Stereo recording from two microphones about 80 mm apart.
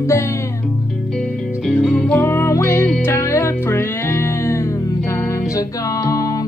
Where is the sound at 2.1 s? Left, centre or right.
Left.